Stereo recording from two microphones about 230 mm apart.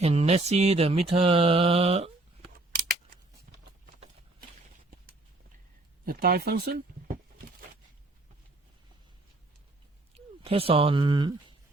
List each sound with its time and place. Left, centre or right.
0.0 s mantra: right
6.1 s speech: right
10.2 s speech: right